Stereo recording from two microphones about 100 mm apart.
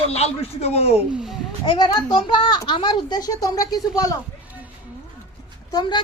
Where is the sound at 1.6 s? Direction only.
45° left (ahead or behind).